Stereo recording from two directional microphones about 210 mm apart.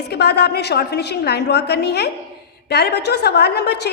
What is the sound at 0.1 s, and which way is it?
A woman's voice, 50° left (ahead or behind).